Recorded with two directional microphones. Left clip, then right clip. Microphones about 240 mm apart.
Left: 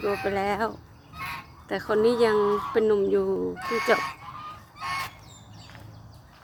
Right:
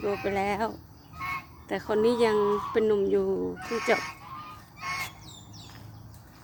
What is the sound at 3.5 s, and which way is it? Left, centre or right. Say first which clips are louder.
Speech: left 4 dB; left.